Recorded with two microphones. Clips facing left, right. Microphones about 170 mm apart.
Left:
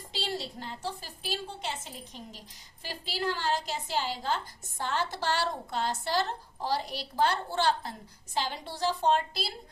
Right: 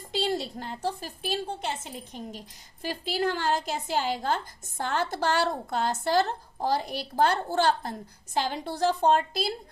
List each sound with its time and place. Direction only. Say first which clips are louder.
0.1 s speech: right 7 dB; 50° right (ahead or behind)